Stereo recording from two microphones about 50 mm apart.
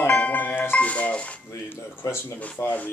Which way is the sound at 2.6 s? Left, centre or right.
Left.